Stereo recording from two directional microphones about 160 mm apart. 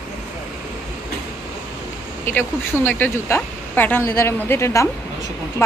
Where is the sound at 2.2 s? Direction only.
15° left (ahead or behind).